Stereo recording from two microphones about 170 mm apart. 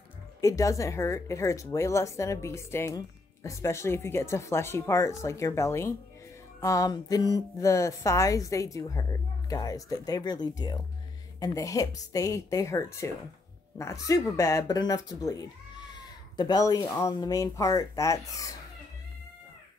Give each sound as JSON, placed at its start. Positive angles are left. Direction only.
{"t": 0.4, "sound": "speech", "side_deg": 20}